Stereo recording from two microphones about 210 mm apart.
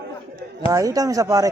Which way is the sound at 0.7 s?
15° right (ahead or behind).